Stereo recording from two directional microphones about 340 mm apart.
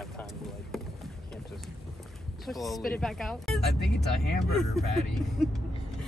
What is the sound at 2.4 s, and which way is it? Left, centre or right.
Speech, centre.